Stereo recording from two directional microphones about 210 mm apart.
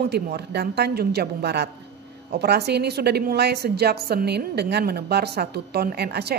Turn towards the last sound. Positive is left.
turn(degrees=-50)  # may be behind; listen again after turning